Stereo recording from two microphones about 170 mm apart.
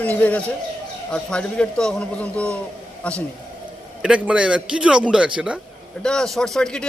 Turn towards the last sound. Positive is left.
turn(degrees=5)  # may be behind; listen again after turning